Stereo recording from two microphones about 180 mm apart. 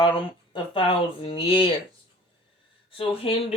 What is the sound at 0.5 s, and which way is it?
Speech, 30° left (ahead or behind).